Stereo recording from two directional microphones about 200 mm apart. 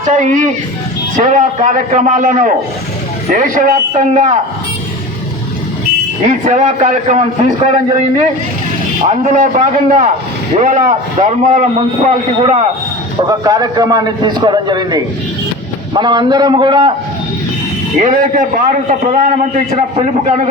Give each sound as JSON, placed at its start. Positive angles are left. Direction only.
{"t": 0.1, "sound": "a man's voice", "side_deg": -40}
{"t": 6.2, "sound": "a man's voice", "side_deg": -35}
{"t": 9.0, "sound": "a man's voice", "side_deg": -35}
{"t": 13.2, "sound": "a man's voice", "side_deg": -20}
{"t": 18.0, "sound": "a man's voice", "side_deg": -40}